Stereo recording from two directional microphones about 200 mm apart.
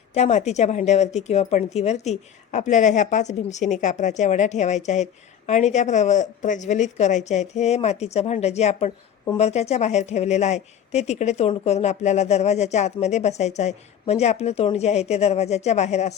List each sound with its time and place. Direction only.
0.1 s speech: 35° left (ahead or behind)